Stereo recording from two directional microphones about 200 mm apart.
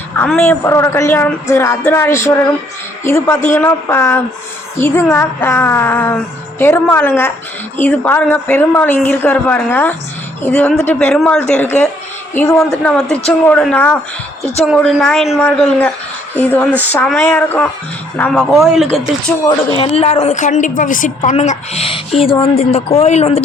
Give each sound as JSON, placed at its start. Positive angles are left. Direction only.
{"t": 0.2, "sound": "a woman's voice", "side_deg": 10}
{"t": 19.5, "sound": "a woman's voice", "side_deg": 25}